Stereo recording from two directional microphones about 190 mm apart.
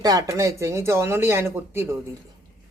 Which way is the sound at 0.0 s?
20° right (ahead or behind).